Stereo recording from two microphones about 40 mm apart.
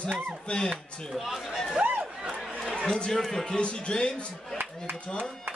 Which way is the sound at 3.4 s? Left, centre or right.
Left.